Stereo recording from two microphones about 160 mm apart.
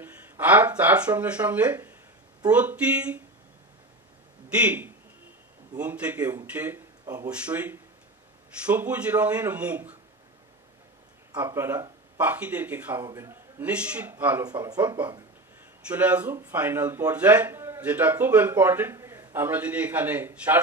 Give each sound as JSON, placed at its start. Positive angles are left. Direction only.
{"t": 0.0, "sound": "speech", "side_deg": -10}
{"t": 4.5, "sound": "a man's voice", "side_deg": -10}
{"t": 11.3, "sound": "speech", "side_deg": -15}
{"t": 14.4, "sound": "speech", "side_deg": -25}
{"t": 15.9, "sound": "speech", "side_deg": -10}